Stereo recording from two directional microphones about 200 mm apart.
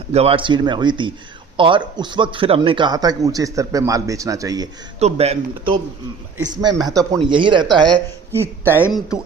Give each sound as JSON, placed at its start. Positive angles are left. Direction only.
{"t": 0.1, "sound": "speech", "side_deg": -30}
{"t": 4.9, "sound": "speech", "side_deg": -30}
{"t": 7.7, "sound": "a man's voice", "side_deg": 0}